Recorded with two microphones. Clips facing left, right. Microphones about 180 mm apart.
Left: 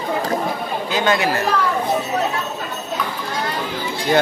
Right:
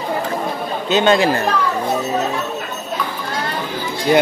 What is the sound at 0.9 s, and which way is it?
Speech, 25° right (ahead or behind).